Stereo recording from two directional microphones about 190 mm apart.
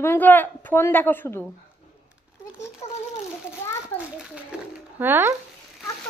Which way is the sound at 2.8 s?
35° left (ahead or behind).